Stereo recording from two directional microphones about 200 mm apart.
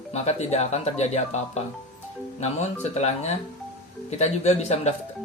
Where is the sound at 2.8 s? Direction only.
35° left (ahead or behind).